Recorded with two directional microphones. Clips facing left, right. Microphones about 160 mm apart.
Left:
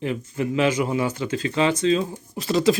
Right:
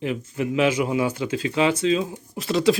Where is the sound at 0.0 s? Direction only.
5° right (ahead or behind).